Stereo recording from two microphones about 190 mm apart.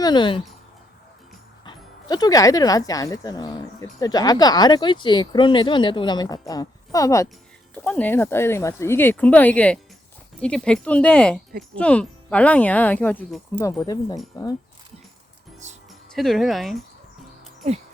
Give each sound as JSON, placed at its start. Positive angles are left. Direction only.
{"t": 0.0, "sound": "speech", "side_deg": 25}
{"t": 1.6, "sound": "speech", "side_deg": 20}
{"t": 15.9, "sound": "speech", "side_deg": 0}